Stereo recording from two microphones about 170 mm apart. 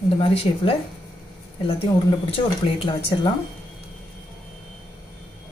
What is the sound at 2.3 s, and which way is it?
Speech, 30° left (ahead or behind).